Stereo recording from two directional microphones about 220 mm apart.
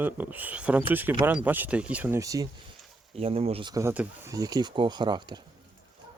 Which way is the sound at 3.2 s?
25° right (ahead or behind).